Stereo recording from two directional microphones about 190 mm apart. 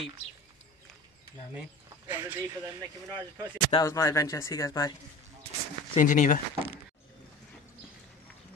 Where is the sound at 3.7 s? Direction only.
20° left (ahead or behind).